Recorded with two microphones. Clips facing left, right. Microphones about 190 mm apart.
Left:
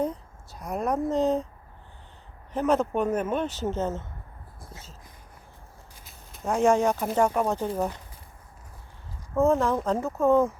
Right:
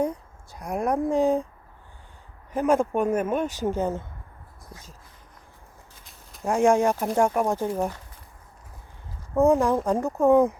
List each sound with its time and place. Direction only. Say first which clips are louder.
0.0 s a sound: right 2 dB; 10° right (ahead or behind)
1.1 s a man's voice: right 3 dB; 10° right (ahead or behind)
2.5 s a man's voice: right 2 dB; 10° right (ahead or behind)
6.1 s a sound: right 3 dB; centre (ahead or behind)
6.5 s a man's voice: right 2 dB; 10° right (ahead or behind)
9.3 s a man's voice: right 3 dB; 15° right (ahead or behind)